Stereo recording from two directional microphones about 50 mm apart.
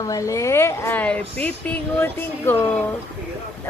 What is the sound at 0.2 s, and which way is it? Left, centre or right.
Speech, left.